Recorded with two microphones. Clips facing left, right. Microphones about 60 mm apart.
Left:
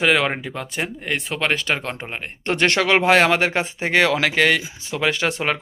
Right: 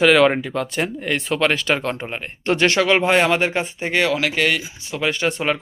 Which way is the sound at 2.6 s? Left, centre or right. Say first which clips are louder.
Even; left.